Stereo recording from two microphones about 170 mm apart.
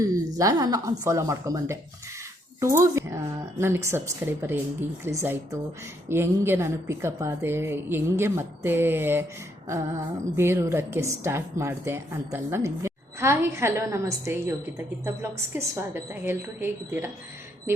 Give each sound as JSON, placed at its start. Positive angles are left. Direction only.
{"t": 0.0, "sound": "a woman's voice", "side_deg": -20}